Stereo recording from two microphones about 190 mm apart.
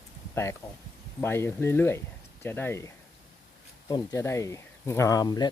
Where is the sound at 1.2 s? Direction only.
10° left (ahead or behind).